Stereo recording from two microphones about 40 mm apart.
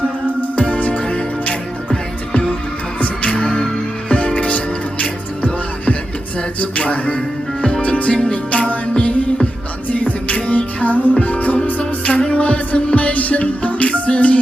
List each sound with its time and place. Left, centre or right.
0.5 s music: left
4.4 s music: left
6.6 s music: left
9.9 s music: left